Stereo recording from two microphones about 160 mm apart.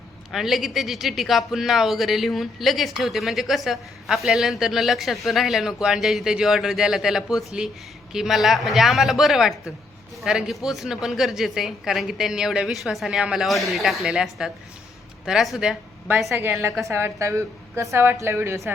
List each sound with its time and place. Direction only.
0.3 s speech: centre (ahead or behind)
16.4 s a woman's voice: 15° right (ahead or behind)